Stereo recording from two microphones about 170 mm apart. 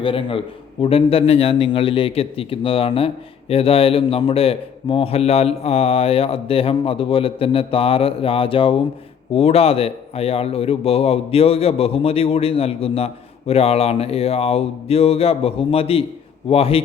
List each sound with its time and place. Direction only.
0.0 s a man's voice: 30° left (ahead or behind)